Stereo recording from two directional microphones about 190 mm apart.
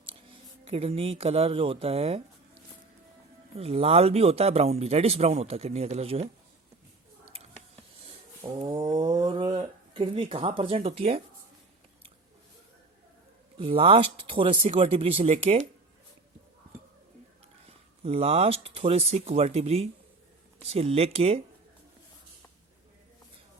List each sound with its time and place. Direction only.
0.6 s speech: 30° right (ahead or behind)
3.5 s speech: 30° right (ahead or behind)
7.3 s a sound: 30° right (ahead or behind)
8.5 s speech: 20° right (ahead or behind)
13.6 s speech: 30° right (ahead or behind)
17.7 s speech: 30° right (ahead or behind)